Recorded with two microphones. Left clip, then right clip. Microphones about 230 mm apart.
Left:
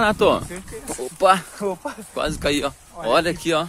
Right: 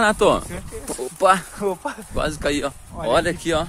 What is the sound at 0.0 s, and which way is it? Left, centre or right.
Speech, centre.